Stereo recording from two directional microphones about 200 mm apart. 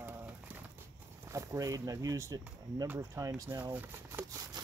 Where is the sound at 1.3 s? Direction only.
15° right (ahead or behind).